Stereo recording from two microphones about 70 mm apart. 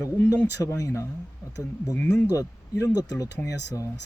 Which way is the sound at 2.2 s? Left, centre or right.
Left.